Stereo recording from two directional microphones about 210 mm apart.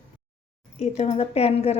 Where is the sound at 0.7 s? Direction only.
30° left (ahead or behind).